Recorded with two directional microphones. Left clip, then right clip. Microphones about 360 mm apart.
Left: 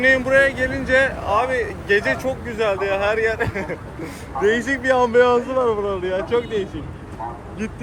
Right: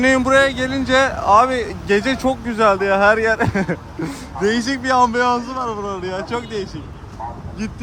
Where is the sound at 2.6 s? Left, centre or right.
Right.